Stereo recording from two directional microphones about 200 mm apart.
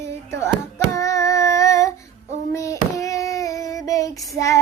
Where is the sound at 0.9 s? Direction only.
15° left (ahead or behind).